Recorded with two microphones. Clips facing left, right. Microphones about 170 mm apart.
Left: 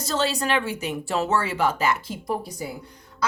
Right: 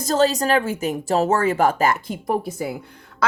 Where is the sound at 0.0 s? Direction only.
40° right (ahead or behind).